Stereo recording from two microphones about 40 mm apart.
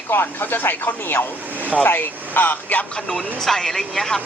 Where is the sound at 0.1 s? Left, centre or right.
Left.